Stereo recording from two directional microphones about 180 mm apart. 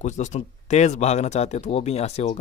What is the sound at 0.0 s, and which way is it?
Speech, 40° left (ahead or behind).